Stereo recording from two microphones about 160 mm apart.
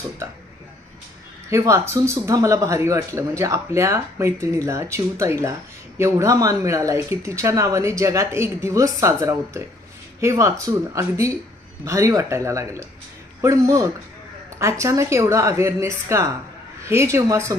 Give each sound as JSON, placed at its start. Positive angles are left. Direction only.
{"t": 1.5, "sound": "a woman's voice", "side_deg": -15}